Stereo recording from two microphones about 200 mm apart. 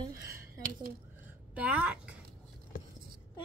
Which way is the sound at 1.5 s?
5° right (ahead or behind).